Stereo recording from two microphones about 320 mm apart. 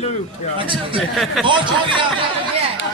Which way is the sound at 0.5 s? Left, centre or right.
Centre.